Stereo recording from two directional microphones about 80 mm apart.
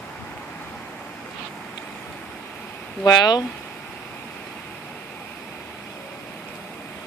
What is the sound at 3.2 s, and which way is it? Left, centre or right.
Speech, left.